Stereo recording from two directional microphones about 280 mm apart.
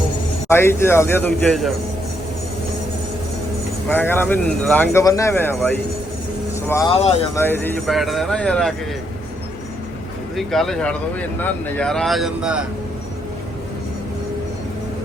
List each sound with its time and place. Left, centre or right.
0.4 s speech: centre
3.8 s speech: centre
6.9 s speech: left
7.3 s speech: centre
10.3 s speech: centre